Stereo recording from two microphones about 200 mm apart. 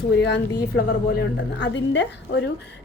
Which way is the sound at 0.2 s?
60° left (ahead or behind).